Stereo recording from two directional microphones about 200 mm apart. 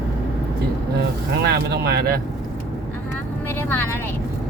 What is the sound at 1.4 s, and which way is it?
Speech, 50° right (ahead or behind).